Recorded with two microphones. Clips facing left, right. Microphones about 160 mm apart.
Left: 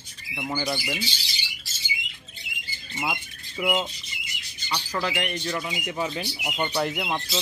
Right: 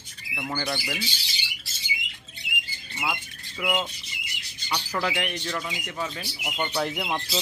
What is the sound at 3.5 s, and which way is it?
Speech, 10° left (ahead or behind).